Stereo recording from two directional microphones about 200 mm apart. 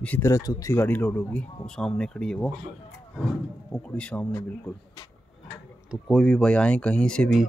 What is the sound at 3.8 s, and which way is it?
Speech, 5° left (ahead or behind).